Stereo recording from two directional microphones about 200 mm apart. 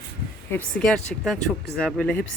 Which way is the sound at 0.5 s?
5° left (ahead or behind).